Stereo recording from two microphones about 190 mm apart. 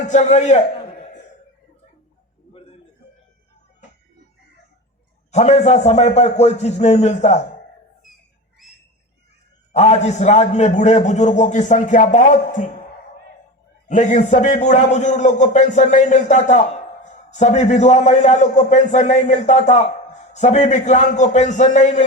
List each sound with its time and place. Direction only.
0.1 s speech: 40° left (ahead or behind)
2.5 s a sound: 30° left (ahead or behind)
5.3 s speech: 35° left (ahead or behind)
9.7 s speech: 35° left (ahead or behind)
13.8 s speech: 40° left (ahead or behind)